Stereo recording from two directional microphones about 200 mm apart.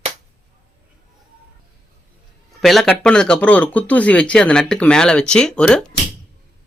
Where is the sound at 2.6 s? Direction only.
Centre (ahead or behind).